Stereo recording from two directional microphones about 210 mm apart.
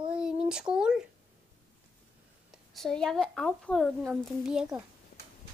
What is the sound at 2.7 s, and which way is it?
A woman's voice, centre (ahead or behind).